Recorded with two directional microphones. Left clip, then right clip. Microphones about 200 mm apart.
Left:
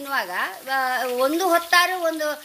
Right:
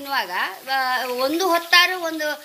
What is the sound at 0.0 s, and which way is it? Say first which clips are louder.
A woman's voice: right 1 dB; 45° left (ahead or behind).